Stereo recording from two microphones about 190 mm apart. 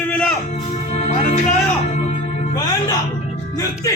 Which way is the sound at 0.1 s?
5° left (ahead or behind).